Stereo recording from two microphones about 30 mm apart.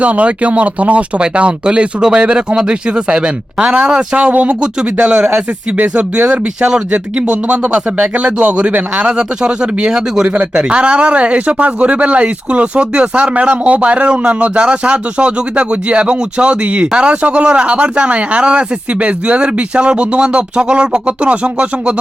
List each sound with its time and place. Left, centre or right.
0.0 s speech: right
1.2 s speech: right
4.6 s speech: right